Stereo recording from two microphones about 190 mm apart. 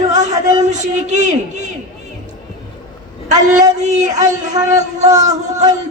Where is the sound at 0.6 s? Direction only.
40° right (ahead or behind).